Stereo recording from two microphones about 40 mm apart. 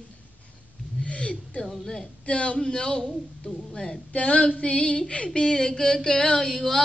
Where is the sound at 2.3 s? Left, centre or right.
Left.